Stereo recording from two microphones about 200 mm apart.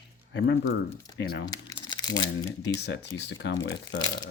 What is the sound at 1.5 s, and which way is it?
Crumpling, 20° left (ahead or behind).